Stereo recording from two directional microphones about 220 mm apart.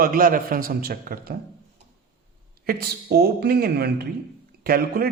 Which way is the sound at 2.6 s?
45° right (ahead or behind).